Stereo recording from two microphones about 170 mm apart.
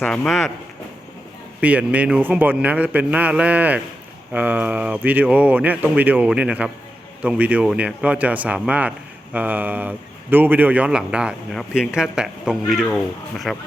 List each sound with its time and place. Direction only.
0.0 s a man's voice: 5° left (ahead or behind)
1.6 s a man's voice: 10° right (ahead or behind)